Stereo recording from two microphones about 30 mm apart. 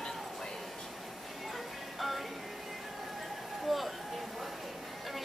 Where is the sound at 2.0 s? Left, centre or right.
Centre.